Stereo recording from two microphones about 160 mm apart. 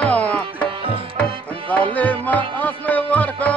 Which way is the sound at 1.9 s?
10° left (ahead or behind).